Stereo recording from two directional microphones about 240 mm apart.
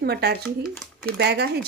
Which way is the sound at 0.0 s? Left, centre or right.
Right.